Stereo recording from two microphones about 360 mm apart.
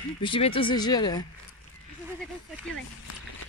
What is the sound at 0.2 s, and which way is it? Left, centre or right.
Speech, centre.